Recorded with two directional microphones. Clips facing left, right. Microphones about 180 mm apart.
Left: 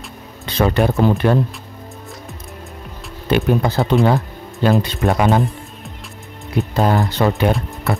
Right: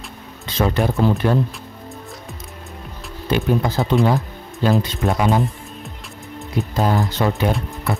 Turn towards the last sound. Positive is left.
turn(degrees=65)  # may be behind; listen again after turning